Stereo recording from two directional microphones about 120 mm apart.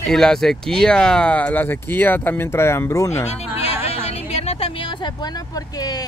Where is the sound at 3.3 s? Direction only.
60° left (ahead or behind); by 6.0 s 30° left (ahead or behind).